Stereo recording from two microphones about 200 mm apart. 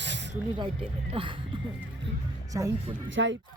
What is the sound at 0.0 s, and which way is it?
Snake, 60° right (ahead or behind).